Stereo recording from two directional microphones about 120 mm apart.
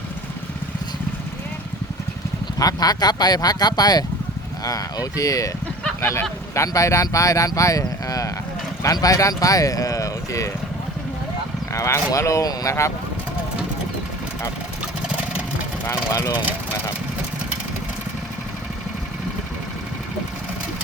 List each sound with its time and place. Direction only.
2.6 s speech: 30° left (ahead or behind)
6.0 s honk: 20° left (ahead or behind)
6.5 s speech: 25° left (ahead or behind)
11.7 s speech: 25° left (ahead or behind)
15.9 s speech: 25° left (ahead or behind)